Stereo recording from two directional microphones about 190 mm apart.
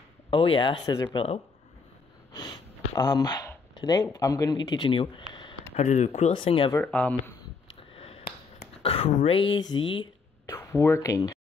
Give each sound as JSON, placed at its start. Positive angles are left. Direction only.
{"t": 0.3, "sound": "speech", "side_deg": 25}
{"t": 2.3, "sound": "speech", "side_deg": 20}
{"t": 6.7, "sound": "speech", "side_deg": 5}
{"t": 7.9, "sound": "a sound", "side_deg": 30}
{"t": 10.5, "sound": "speech", "side_deg": 15}